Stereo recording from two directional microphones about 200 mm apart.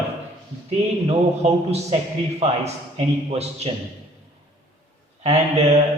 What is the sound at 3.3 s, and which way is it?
Speech, 30° right (ahead or behind).